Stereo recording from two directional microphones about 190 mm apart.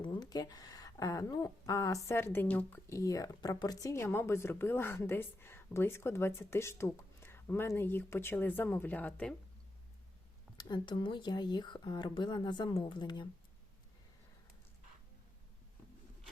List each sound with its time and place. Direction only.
0.0 s speech: 20° left (ahead or behind)
10.6 s speech: 20° left (ahead or behind)